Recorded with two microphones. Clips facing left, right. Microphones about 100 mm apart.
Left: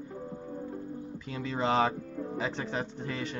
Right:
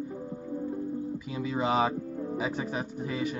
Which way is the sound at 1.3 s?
10° right (ahead or behind).